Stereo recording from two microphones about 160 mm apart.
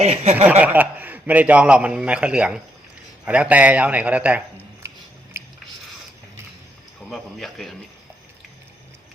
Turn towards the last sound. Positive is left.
turn(degrees=0)  # may be behind; listen again after turning